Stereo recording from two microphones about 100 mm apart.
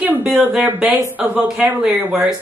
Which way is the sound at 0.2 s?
10° right (ahead or behind).